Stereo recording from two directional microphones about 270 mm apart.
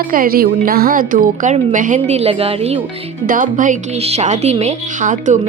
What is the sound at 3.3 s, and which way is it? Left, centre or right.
A woman's voice, right.